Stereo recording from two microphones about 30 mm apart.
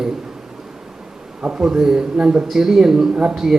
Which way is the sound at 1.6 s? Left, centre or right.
Right.